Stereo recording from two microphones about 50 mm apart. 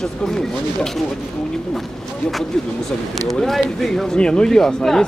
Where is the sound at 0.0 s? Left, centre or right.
Centre.